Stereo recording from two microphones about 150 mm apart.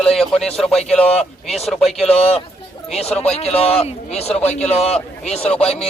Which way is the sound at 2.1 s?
40° left (ahead or behind).